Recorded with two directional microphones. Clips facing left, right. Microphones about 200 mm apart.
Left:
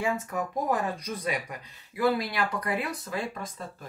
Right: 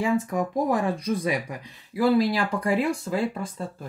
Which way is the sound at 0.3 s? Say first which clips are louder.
Right 5 dB; 30° right (ahead or behind).